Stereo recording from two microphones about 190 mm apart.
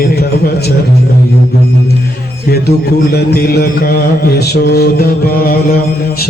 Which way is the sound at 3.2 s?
55° left (ahead or behind).